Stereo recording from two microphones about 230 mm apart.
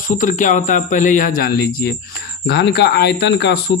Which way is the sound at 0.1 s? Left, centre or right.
Left.